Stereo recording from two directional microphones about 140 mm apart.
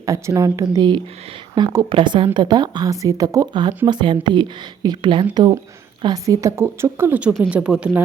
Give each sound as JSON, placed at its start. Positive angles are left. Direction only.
{"t": 0.0, "sound": "a woman's voice", "side_deg": -25}